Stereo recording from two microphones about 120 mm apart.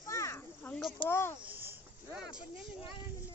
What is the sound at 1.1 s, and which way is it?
Speech, 20° left (ahead or behind).